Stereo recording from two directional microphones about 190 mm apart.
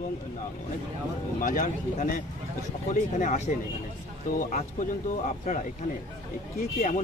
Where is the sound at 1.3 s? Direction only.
45° left (ahead or behind).